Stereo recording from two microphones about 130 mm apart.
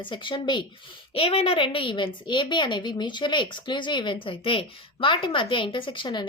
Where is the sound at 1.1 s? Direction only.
50° left (ahead or behind).